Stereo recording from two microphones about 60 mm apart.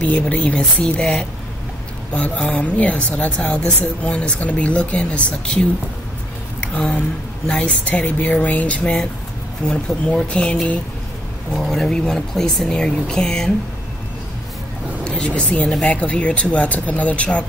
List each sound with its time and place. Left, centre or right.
0.0 s speech: left
2.1 s speech: left
6.6 s speech: centre
15.0 s a woman's voice: centre